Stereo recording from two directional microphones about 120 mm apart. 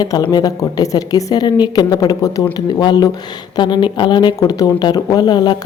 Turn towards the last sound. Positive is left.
turn(degrees=35)  # may be behind; listen again after turning